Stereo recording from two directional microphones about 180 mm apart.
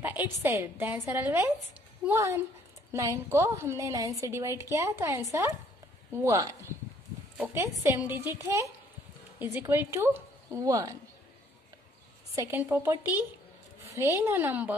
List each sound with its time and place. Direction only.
0.4 s a woman's voice: 15° right (ahead or behind)
12.4 s a woman's voice: 10° right (ahead or behind)